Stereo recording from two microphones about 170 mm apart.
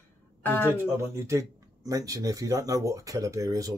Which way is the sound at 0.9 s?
15° right (ahead or behind).